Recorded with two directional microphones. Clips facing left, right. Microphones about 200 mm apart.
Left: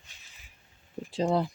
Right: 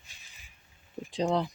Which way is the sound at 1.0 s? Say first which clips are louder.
Left 1 dB; 5° left (ahead or behind).